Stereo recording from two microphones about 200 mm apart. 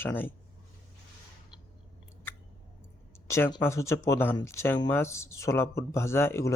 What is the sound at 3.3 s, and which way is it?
Speech, 15° left (ahead or behind).